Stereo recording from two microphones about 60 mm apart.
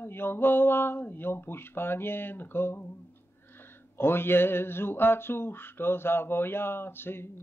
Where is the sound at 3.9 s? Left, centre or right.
Left.